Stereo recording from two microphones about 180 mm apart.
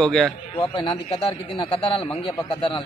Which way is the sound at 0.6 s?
30° left (ahead or behind).